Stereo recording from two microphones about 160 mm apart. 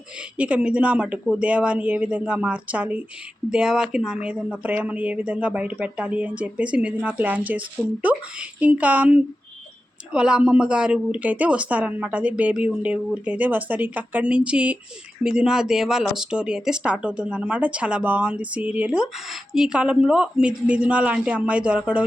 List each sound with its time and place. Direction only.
0.3 s speech: 10° right (ahead or behind)